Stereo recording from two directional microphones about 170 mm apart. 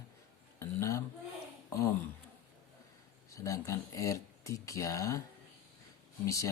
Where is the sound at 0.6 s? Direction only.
15° left (ahead or behind).